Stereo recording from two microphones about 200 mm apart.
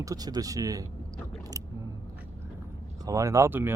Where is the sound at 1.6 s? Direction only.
15° right (ahead or behind).